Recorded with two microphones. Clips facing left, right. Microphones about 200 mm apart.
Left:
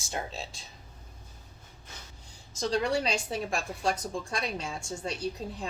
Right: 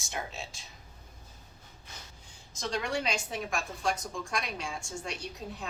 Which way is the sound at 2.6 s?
35° left (ahead or behind).